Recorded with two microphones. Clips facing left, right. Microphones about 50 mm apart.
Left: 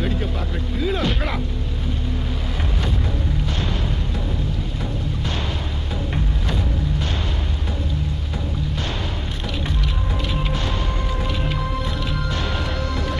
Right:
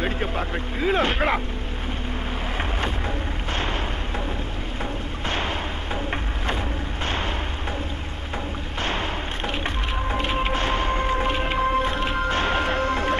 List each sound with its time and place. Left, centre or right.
0.7 s speech: right
10.1 s music: right